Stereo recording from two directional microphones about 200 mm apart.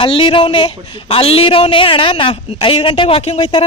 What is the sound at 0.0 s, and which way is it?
Speech, 25° left (ahead or behind).